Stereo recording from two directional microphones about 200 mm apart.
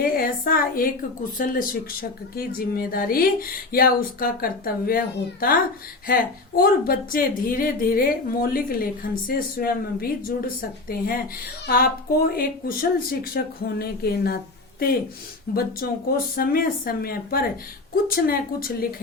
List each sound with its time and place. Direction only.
0.0 s a woman's voice: 45° left (ahead or behind)
6.6 s a woman's voice: 45° left (ahead or behind)